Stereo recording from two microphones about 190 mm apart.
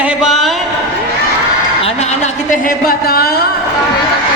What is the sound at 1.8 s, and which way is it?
A woman's voice, 35° left (ahead or behind).